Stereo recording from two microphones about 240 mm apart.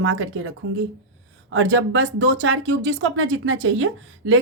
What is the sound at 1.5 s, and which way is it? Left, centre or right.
Speech, right.